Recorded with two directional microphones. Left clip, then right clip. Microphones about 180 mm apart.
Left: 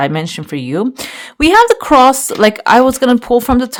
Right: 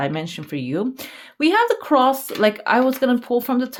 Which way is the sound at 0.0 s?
30° left (ahead or behind).